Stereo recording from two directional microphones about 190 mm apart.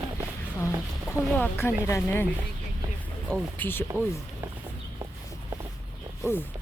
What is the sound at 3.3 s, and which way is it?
Speech, 10° left (ahead or behind).